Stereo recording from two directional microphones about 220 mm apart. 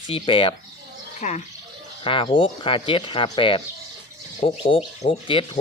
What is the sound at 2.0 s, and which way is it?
Speech, 25° left (ahead or behind).